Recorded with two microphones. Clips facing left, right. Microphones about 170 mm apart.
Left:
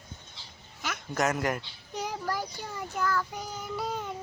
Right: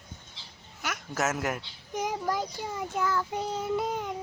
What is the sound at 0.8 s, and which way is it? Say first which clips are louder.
Speech: left 1 dB; centre (ahead or behind).